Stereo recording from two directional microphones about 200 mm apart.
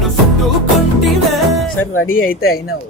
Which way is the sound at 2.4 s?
50° left (ahead or behind).